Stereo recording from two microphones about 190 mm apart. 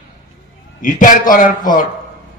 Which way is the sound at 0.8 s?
45° left (ahead or behind).